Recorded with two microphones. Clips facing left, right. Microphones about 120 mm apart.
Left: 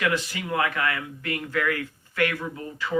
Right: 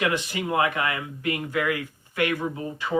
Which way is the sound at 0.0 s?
20° right (ahead or behind).